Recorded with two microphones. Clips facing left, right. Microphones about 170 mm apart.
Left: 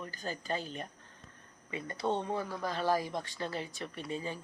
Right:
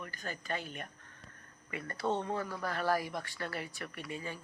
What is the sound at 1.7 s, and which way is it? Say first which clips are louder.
Speech: left 1 dB; 15° left (ahead or behind).